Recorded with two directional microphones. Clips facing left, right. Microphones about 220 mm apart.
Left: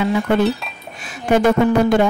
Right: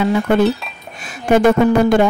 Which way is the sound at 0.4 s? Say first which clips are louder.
Right 3 dB; centre (ahead or behind).